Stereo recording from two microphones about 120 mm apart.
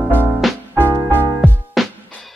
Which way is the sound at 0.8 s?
15° right (ahead or behind).